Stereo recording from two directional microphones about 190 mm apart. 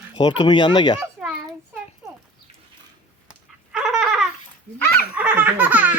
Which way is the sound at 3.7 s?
5° right (ahead or behind).